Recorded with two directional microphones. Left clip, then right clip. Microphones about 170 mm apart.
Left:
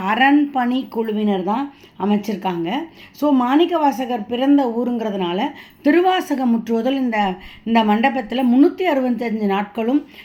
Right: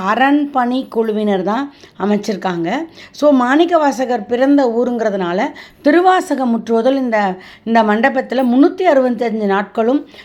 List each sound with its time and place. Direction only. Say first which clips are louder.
0.0 s speech: right 2 dB; 20° right (ahead or behind)